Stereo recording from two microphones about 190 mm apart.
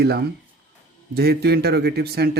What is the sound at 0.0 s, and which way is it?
Speech, 55° right (ahead or behind).